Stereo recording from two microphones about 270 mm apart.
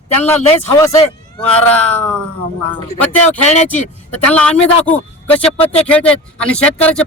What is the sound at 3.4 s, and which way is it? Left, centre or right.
Speech, left.